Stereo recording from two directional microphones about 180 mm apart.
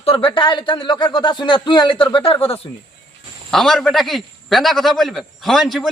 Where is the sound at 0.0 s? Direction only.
30° left (ahead or behind).